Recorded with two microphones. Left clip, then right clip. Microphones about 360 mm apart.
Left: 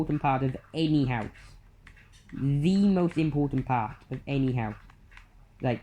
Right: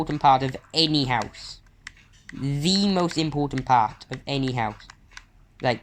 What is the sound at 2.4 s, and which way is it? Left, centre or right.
Speech, right.